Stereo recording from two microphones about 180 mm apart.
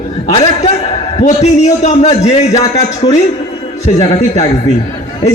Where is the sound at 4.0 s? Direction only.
35° left (ahead or behind).